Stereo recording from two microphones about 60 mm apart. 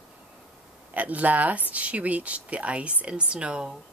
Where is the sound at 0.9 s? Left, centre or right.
Right.